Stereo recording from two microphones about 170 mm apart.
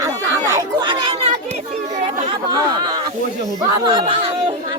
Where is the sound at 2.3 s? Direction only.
25° right (ahead or behind).